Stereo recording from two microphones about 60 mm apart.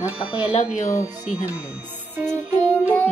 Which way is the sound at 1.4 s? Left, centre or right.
Right.